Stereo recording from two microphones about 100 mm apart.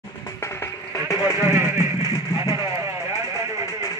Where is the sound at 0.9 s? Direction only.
35° left (ahead or behind).